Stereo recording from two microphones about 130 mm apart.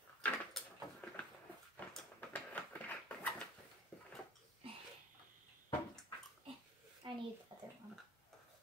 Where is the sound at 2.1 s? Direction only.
15° left (ahead or behind).